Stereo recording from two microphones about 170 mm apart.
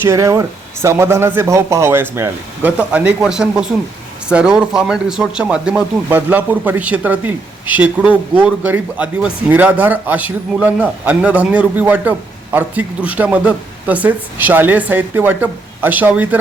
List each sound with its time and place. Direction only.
0.0 s speech: 15° right (ahead or behind)